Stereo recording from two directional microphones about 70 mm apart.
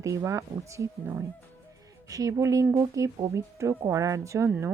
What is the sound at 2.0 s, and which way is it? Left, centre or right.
Speech, right.